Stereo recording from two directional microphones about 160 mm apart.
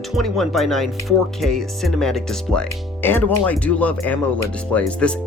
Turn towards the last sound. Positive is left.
turn(degrees=5)  # may be behind; listen again after turning